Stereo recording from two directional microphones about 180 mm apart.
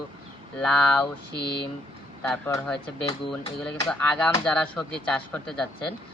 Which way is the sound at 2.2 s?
10° left (ahead or behind).